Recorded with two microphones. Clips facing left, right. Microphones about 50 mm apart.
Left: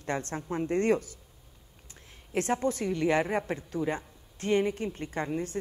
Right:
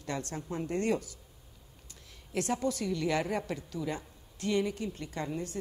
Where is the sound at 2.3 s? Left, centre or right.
Left.